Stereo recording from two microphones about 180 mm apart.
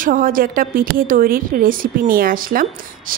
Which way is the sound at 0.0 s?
50° right (ahead or behind).